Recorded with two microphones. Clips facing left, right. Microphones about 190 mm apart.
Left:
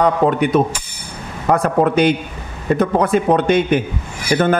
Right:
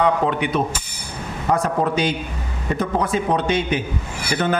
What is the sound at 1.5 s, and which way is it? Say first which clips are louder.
A man's voice: left 5 dB; 60° left (ahead or behind).